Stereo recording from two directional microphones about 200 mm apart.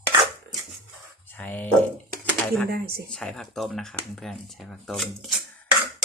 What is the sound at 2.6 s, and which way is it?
Speech, 50° right (ahead or behind).